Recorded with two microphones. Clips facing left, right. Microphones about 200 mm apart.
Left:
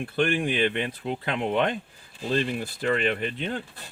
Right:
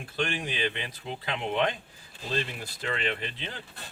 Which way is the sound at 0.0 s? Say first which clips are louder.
Left 7 dB; 55° left (ahead or behind).